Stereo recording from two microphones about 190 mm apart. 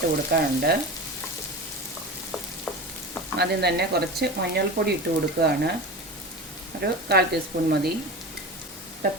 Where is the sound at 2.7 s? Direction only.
5° left (ahead or behind).